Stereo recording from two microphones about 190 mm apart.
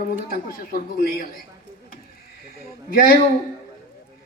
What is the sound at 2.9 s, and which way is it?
Speech, 50° left (ahead or behind).